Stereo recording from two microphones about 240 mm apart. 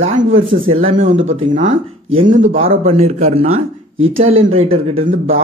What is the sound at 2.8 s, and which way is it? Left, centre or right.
Speech, right.